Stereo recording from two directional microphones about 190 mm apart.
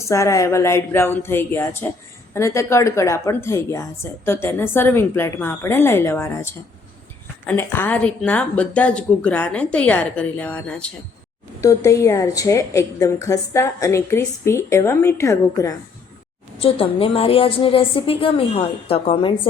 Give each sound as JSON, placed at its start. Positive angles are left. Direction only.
{"t": 0.0, "sound": "a woman's voice", "side_deg": 15}
{"t": 11.6, "sound": "a woman's voice", "side_deg": 15}
{"t": 16.6, "sound": "a woman's voice", "side_deg": 30}